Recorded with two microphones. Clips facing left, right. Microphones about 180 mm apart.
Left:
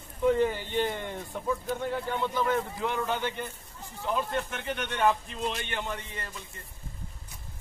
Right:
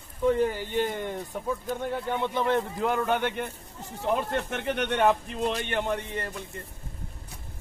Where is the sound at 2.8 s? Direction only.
50° right (ahead or behind).